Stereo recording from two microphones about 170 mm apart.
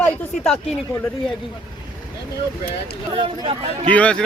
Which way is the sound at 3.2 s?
30° right (ahead or behind).